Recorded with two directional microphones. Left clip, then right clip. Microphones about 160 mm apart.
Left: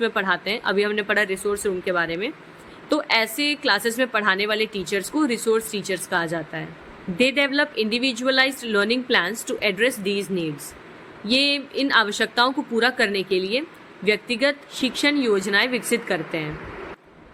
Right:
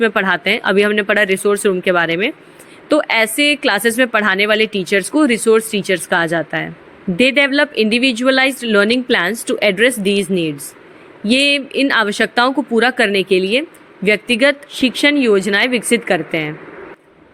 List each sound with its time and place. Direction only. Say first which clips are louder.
0.0 s speech: right 8 dB; 35° right (ahead or behind)